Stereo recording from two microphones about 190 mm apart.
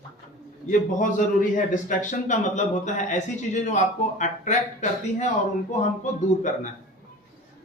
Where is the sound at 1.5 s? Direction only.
40° left (ahead or behind).